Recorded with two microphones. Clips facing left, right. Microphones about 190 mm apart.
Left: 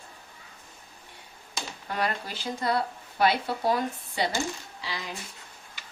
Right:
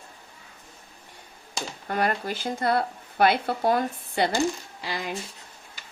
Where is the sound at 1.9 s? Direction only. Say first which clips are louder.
Right 4 dB; 50° right (ahead or behind).